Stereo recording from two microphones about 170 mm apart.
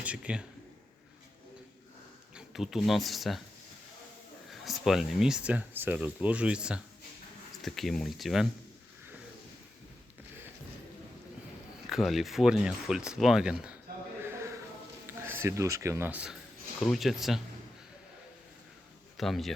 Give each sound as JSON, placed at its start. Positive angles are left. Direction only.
{"t": 0.0, "sound": "speech", "side_deg": -5}
{"t": 2.3, "sound": "speech", "side_deg": 0}
{"t": 4.5, "sound": "speech", "side_deg": 0}
{"t": 11.9, "sound": "speech", "side_deg": 0}
{"t": 14.3, "sound": "music", "side_deg": -15}
{"t": 15.0, "sound": "speech", "side_deg": -15}
{"t": 19.1, "sound": "speech", "side_deg": 0}